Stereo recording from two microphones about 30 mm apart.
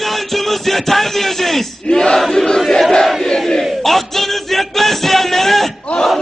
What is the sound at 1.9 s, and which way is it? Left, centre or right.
Battle cry, left.